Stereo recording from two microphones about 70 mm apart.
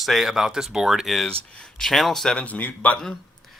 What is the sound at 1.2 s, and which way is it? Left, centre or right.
Speech, centre.